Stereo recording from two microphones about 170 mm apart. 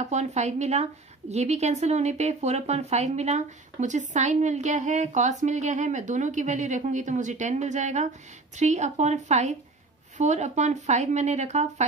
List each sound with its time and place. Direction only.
0.0 s a woman's voice: 40° right (ahead or behind)